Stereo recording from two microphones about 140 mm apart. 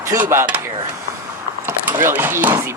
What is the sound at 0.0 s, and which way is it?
Speech, 20° right (ahead or behind).